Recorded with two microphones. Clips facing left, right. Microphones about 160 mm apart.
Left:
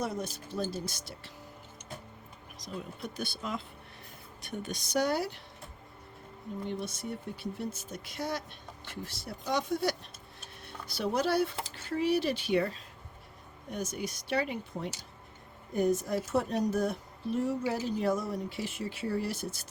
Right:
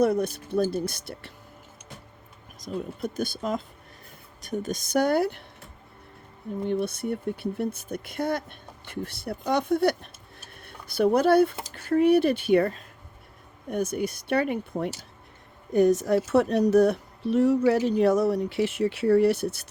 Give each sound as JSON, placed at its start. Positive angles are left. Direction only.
{"t": 0.0, "sound": "speech", "side_deg": -60}
{"t": 2.6, "sound": "speech", "side_deg": -50}
{"t": 6.7, "sound": "speech", "side_deg": -60}
{"t": 15.7, "sound": "a woman's voice", "side_deg": -75}